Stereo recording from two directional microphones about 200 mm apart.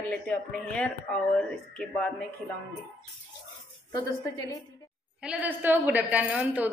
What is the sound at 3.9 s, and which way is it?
Speech, 15° left (ahead or behind).